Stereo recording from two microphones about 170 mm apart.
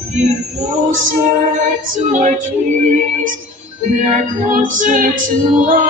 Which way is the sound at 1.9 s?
45° right (ahead or behind).